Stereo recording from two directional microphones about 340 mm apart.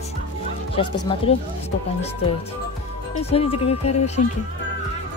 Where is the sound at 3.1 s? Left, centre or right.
Centre.